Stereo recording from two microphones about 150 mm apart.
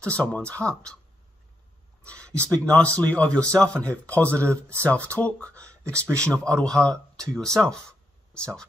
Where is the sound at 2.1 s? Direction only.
10° left (ahead or behind).